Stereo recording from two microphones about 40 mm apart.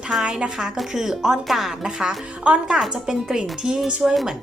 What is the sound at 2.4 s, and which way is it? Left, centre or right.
Speech, right.